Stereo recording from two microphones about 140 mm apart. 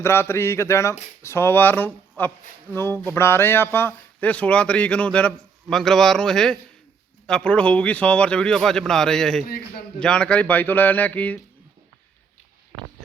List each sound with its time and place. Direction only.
0.0 s a man's voice: 15° left (ahead or behind)